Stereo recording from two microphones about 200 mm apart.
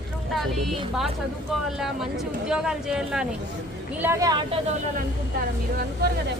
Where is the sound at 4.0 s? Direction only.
15° right (ahead or behind).